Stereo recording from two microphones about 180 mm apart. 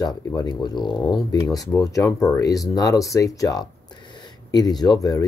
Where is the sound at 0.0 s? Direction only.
20° left (ahead or behind).